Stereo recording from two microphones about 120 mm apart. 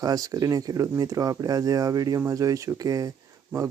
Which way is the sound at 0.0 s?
30° right (ahead or behind).